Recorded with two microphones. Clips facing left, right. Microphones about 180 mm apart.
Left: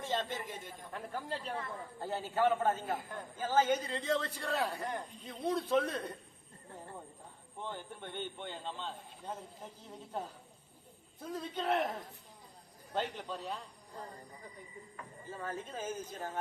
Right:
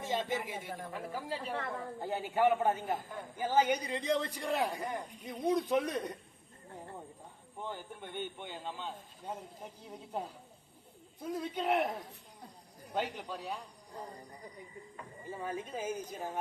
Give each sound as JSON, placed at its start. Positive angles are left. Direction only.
{"t": 0.0, "sound": "a man's voice", "side_deg": -10}
{"t": 2.0, "sound": "a man's voice", "side_deg": -15}
{"t": 7.6, "sound": "a man's voice", "side_deg": -10}
{"t": 12.9, "sound": "speech", "side_deg": -10}
{"t": 15.3, "sound": "a man's voice", "side_deg": -15}